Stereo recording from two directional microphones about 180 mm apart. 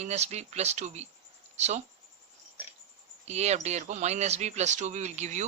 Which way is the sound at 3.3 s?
40° right (ahead or behind).